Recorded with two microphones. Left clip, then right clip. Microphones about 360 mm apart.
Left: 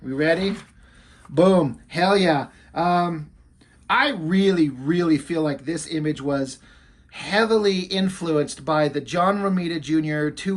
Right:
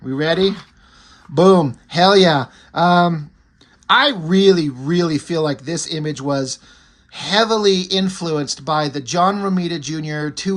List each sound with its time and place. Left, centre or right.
0.1 s speech: centre